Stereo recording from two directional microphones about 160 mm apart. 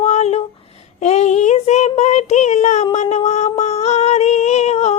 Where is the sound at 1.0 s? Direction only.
45° left (ahead or behind).